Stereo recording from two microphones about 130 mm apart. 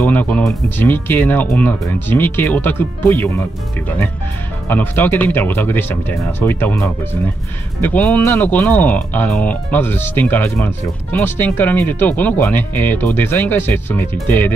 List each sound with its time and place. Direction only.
0.0 s speech: 15° left (ahead or behind)
4.6 s speech: 15° left (ahead or behind)